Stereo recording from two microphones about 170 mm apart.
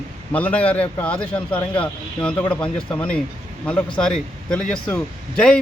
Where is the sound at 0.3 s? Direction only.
10° left (ahead or behind).